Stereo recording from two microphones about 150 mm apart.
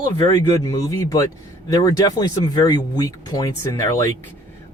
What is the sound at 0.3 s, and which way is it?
Speech, 25° left (ahead or behind).